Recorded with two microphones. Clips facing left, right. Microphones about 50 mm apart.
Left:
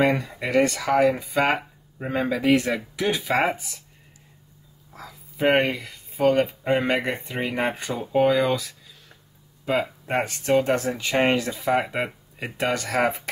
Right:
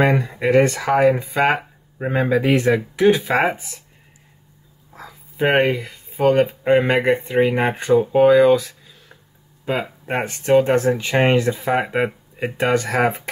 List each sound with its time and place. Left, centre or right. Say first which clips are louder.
0.0 s speech: right 4 dB; right
4.9 s speech: right 5 dB; right
7.9 s speech: right 9 dB; centre